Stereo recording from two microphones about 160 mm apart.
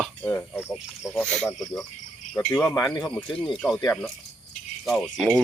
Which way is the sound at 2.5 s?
15° left (ahead or behind).